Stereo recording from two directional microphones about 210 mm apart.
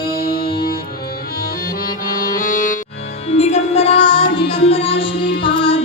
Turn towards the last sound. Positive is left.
turn(degrees=25)  # may be behind; listen again after turning